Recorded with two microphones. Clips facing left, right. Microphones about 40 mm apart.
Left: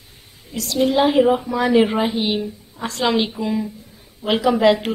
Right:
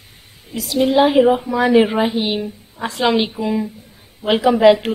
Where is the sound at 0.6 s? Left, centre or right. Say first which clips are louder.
Right 3 dB; centre.